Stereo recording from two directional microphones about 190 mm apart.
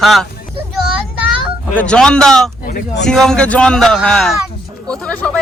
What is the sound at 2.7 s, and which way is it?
Speech, 50° left (ahead or behind).